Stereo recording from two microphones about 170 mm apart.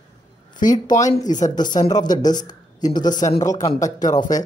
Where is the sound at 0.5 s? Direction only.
25° left (ahead or behind).